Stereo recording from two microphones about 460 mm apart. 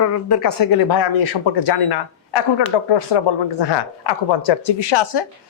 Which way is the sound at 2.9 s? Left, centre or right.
Left.